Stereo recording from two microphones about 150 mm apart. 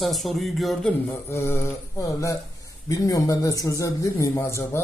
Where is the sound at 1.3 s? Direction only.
15° left (ahead or behind).